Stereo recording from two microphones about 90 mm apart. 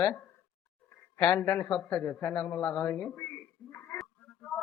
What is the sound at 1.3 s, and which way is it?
Speech, 20° left (ahead or behind).